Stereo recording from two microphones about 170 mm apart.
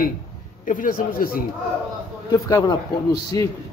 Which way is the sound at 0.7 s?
50° left (ahead or behind).